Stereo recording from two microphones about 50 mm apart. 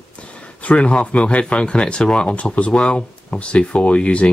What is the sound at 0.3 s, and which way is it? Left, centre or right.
Speech, left.